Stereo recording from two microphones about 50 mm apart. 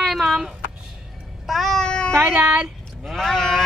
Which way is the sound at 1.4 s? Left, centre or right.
Centre.